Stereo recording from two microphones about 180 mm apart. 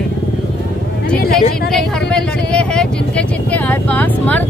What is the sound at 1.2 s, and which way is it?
Vehicle, 55° left (ahead or behind).